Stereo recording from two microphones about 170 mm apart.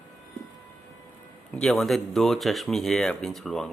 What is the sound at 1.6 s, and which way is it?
Speech, centre (ahead or behind).